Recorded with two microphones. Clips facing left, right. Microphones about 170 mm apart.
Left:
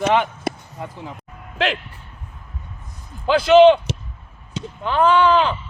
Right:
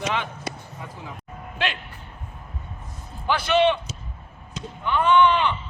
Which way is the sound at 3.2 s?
90° left.